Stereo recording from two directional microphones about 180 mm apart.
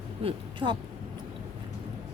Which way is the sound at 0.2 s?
30° right (ahead or behind).